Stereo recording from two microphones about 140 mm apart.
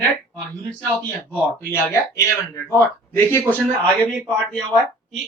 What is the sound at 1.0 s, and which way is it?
Speech, 10° left (ahead or behind).